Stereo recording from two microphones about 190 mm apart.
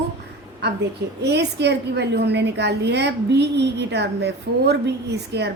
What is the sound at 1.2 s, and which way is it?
A woman's voice, 65° right (ahead or behind).